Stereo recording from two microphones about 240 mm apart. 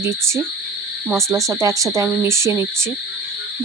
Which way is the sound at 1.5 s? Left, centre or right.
Centre.